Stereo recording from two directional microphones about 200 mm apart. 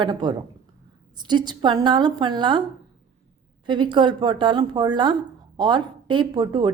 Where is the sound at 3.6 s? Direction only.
25° right (ahead or behind).